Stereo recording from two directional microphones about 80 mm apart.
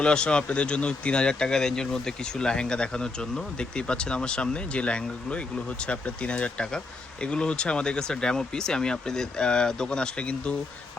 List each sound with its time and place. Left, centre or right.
0.0 s speech: centre